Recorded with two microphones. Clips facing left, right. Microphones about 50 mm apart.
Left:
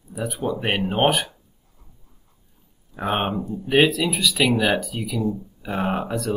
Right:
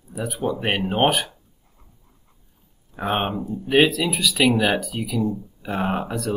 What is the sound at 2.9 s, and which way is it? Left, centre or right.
Speech, centre.